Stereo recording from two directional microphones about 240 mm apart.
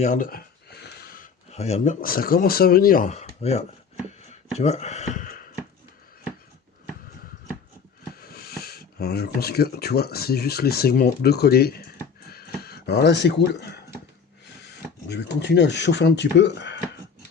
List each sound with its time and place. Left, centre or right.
0.0 s speech: left
4.3 s a sound: left
8.2 s speech: left
15.1 s speech: left